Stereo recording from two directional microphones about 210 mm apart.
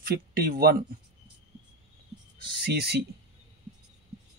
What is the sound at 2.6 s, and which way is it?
Speech, 50° right (ahead or behind).